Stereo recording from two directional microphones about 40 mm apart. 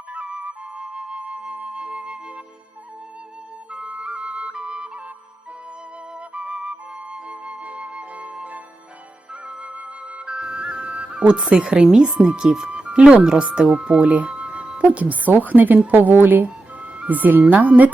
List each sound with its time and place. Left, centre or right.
0.1 s flute: right
3.7 s flute: right
6.1 s flute: right
12.7 s music: right
13.4 s a woman's voice: right